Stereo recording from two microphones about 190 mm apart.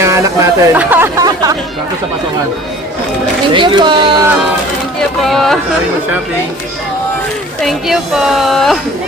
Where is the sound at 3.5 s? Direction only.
25° right (ahead or behind).